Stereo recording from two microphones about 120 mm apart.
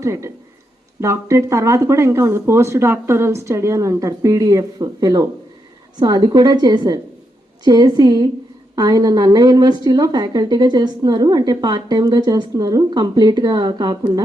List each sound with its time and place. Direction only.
0.0 s a woman's voice: 25° right (ahead or behind)